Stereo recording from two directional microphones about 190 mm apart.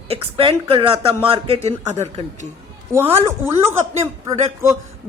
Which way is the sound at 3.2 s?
10° right (ahead or behind).